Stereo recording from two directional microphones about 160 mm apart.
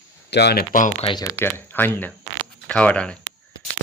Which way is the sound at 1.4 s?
10° left (ahead or behind).